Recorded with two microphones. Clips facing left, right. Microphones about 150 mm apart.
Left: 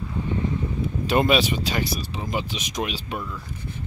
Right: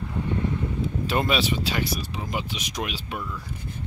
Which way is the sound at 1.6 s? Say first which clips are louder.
Left 1 dB; 40° left (ahead or behind).